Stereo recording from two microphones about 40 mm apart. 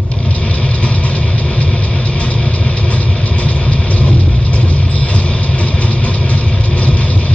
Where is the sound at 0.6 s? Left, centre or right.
Left.